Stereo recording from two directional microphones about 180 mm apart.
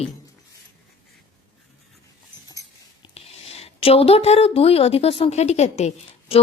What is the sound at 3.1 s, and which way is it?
A woman's voice, 35° left (ahead or behind).